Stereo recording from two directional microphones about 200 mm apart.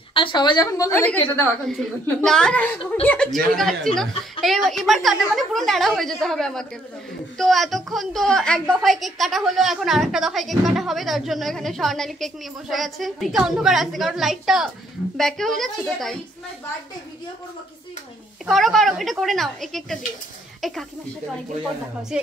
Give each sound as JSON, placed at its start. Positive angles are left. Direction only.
{"t": 0.1, "sound": "a woman's voice", "side_deg": 25}
{"t": 18.5, "sound": "a woman's voice", "side_deg": 0}